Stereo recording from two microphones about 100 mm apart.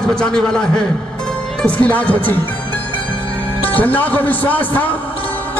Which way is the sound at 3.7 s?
15° left (ahead or behind).